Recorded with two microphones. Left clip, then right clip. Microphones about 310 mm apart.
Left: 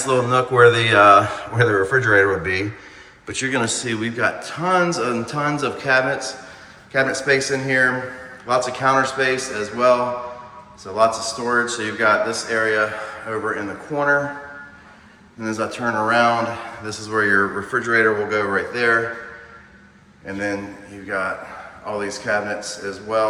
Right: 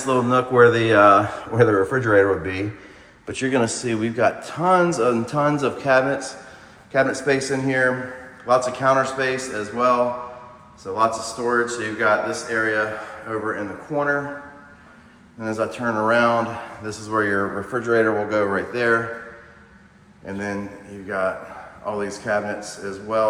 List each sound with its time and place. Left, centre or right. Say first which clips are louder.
0.1 s a man's voice: left 1 dB; centre
15.4 s a man's voice: even; centre
20.3 s a man's voice: left 3 dB; centre